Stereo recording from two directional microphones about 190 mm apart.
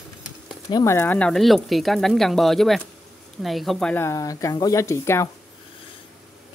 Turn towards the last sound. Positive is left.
turn(degrees=15)  # may be behind; listen again after turning